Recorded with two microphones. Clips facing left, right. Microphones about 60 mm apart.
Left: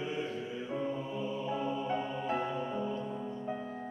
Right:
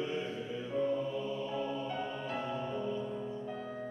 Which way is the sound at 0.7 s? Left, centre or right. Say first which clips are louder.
Right 4 dB; centre.